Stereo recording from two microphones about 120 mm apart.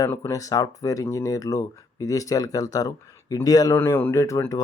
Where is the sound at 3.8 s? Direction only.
20° left (ahead or behind).